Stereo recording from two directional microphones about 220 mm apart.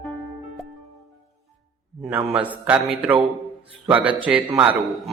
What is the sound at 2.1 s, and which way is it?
A man's voice, 5° right (ahead or behind).